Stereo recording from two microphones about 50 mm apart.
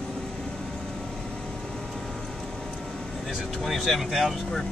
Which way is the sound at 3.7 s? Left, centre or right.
Centre.